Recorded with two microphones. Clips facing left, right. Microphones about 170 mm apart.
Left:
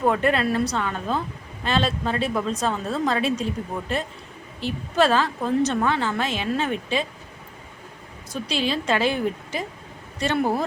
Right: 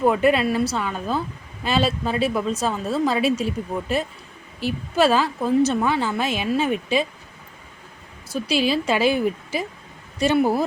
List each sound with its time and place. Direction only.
0.0 s a woman's voice: 10° right (ahead or behind)
8.3 s a woman's voice: 5° right (ahead or behind)